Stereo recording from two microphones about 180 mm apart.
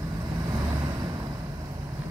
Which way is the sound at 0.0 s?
20° right (ahead or behind).